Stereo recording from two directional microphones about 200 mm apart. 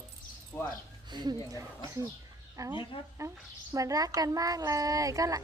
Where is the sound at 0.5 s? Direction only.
5° left (ahead or behind).